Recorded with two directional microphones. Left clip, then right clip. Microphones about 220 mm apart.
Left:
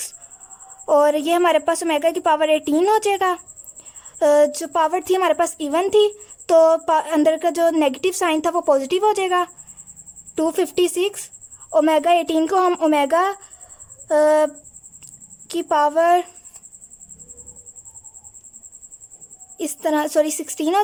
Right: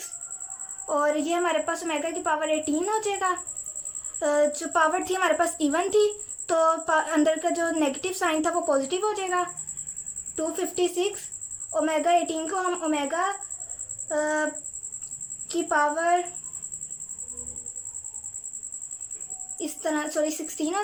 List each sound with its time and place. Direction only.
0.9 s a woman's voice: 20° left (ahead or behind)
15.0 s a sound: 15° left (ahead or behind)
19.5 s speech: 15° left (ahead or behind)